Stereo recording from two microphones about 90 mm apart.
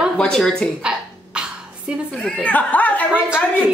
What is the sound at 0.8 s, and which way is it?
Dog, 10° right (ahead or behind).